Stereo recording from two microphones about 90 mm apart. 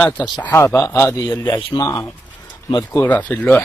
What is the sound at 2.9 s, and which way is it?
Speech, 20° left (ahead or behind).